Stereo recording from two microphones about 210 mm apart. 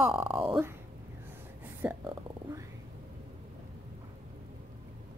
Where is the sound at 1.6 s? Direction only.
10° right (ahead or behind).